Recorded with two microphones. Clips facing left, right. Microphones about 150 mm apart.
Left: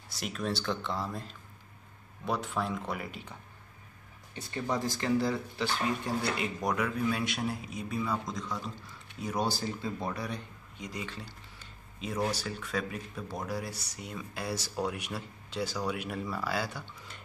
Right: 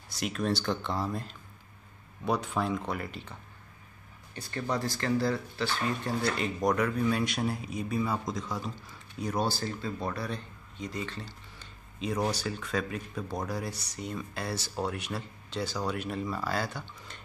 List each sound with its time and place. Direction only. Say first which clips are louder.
0.1 s a man's voice: right 4 dB; 5° left (ahead or behind)
4.4 s a man's voice: even; 15° left (ahead or behind); by 8.5 s 5° right (ahead or behind)
9.4 s a man's voice: even; 15° left (ahead or behind)